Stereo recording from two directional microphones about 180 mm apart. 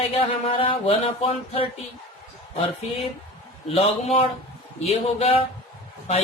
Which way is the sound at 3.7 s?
35° left (ahead or behind).